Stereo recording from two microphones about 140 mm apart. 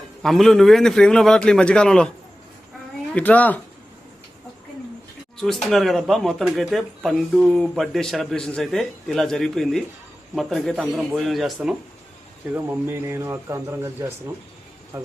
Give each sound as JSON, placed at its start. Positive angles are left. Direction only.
{"t": 0.2, "sound": "speech", "side_deg": 0}
{"t": 3.2, "sound": "speech", "side_deg": 10}
{"t": 5.6, "sound": "speech", "side_deg": 0}
{"t": 12.5, "sound": "speech", "side_deg": -15}